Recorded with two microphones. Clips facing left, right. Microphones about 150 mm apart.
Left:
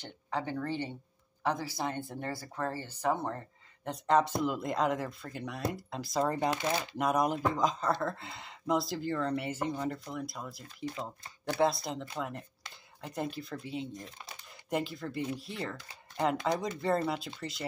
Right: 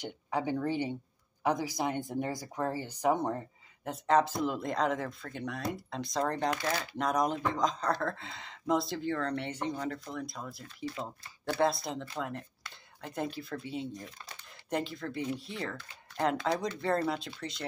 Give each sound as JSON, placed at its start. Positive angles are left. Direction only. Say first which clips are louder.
{"t": 0.0, "sound": "speech", "louder": "right 3 dB", "side_deg": -10}
{"t": 3.8, "sound": "speech", "louder": "even", "side_deg": 0}
{"t": 6.5, "sound": "speech", "louder": "left 1 dB", "side_deg": 20}
{"t": 7.0, "sound": "speech", "louder": "left 1 dB", "side_deg": 5}